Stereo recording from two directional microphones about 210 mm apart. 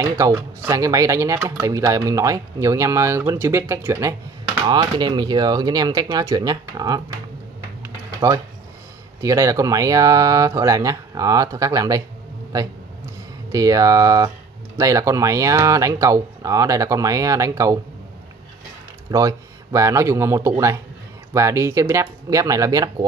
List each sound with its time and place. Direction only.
0.0 s speech: 15° right (ahead or behind)
7.8 s typing: 15° right (ahead or behind)
9.2 s speech: 15° right (ahead or behind)
13.5 s speech: 15° right (ahead or behind)
19.0 s speech: 15° right (ahead or behind)